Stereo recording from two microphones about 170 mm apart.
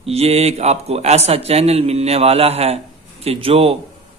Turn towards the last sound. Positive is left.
turn(degrees=-35)  # may be behind; listen again after turning